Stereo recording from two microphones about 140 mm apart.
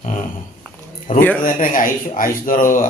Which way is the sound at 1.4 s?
75° left (ahead or behind).